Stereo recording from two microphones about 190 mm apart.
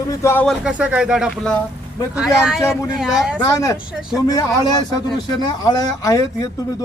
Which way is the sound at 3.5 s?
15° left (ahead or behind).